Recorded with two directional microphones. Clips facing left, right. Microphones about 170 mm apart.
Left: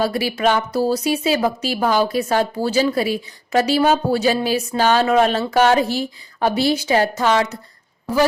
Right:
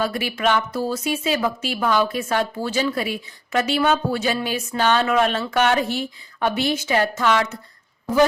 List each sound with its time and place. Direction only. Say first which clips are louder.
0.0 s a woman's voice: left 4 dB; 35° left (ahead or behind)